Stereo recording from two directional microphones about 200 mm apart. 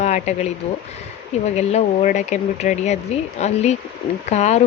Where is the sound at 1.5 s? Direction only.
35° left (ahead or behind).